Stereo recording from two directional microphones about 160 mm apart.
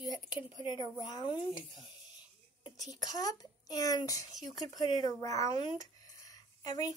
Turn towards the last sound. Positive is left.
turn(degrees=25)  # may be behind; listen again after turning